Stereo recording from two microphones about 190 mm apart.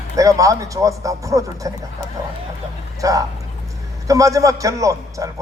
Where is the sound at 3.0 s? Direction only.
20° right (ahead or behind).